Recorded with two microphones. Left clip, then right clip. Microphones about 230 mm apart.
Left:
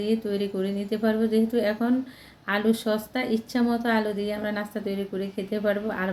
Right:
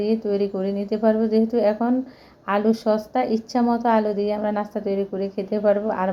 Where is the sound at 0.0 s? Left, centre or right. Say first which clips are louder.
Right 5 dB; centre.